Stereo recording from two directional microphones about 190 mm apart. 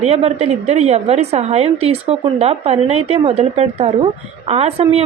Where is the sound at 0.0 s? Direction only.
35° right (ahead or behind).